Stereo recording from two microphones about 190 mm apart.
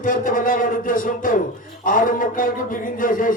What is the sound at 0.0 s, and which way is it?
A man's voice, 45° left (ahead or behind).